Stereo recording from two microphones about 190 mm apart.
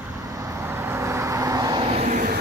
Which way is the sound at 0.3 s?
15° right (ahead or behind).